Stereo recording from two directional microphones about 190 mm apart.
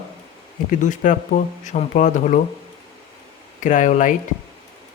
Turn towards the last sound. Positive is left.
turn(degrees=40)  # may be behind; listen again after turning